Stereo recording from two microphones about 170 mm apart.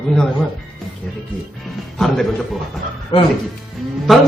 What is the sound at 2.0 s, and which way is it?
Speech, centre (ahead or behind).